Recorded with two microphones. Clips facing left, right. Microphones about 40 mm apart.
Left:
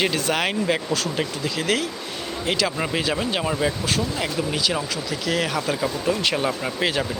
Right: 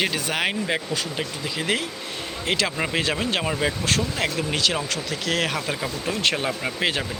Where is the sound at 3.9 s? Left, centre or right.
Right.